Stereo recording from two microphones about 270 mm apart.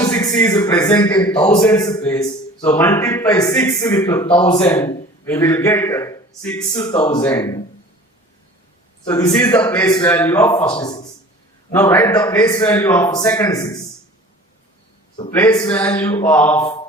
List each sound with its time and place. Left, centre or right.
0.0 s a man's voice: centre
9.0 s a man's voice: centre
15.4 s a man's voice: centre